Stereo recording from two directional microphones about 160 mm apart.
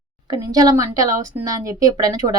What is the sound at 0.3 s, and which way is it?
Speech, 25° right (ahead or behind).